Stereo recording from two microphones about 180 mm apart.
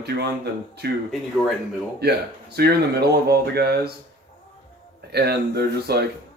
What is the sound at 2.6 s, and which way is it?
Speech, 65° right (ahead or behind).